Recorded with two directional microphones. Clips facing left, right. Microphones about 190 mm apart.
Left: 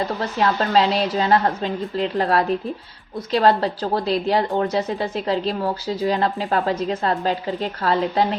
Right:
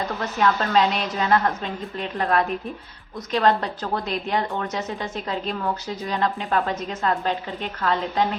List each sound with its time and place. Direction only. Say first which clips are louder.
0.2 s a woman's voice: right 2 dB; 30° left (ahead or behind)
3.6 s a woman's voice: left 5 dB; 35° left (ahead or behind)